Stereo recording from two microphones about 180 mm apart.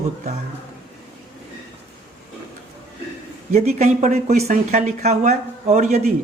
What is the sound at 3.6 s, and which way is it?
Speech, 40° right (ahead or behind).